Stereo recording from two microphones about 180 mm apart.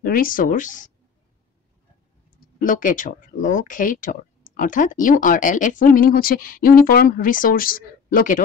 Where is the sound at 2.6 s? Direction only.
45° left (ahead or behind).